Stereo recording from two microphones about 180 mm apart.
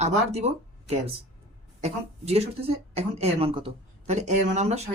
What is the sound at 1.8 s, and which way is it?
Speech, 35° right (ahead or behind).